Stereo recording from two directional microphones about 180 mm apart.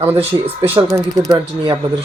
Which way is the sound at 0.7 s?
20° right (ahead or behind).